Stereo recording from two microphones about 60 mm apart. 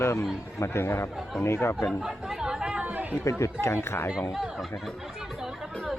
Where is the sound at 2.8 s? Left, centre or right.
Right.